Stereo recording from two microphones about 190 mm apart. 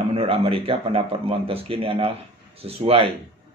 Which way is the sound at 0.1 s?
30° right (ahead or behind).